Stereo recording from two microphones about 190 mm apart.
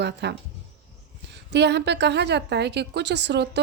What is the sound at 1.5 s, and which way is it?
A woman's voice, 65° right (ahead or behind).